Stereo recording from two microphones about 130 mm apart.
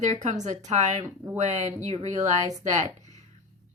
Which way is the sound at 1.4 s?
65° right (ahead or behind).